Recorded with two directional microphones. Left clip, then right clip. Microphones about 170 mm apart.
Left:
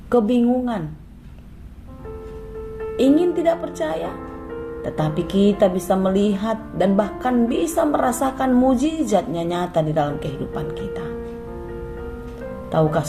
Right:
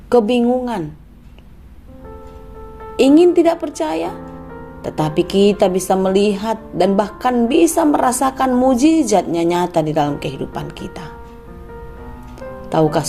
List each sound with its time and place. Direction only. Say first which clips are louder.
0.1 s a woman's voice: right 4 dB; 25° right (ahead or behind)
2.9 s a woman's voice: right 7 dB; 30° right (ahead or behind)
5.1 s a woman's voice: right 7 dB; 25° right (ahead or behind)
12.7 s a woman's voice: right 4 dB; 25° right (ahead or behind)